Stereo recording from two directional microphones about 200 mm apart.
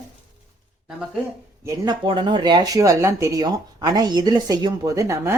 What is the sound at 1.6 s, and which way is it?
Speech, 15° right (ahead or behind).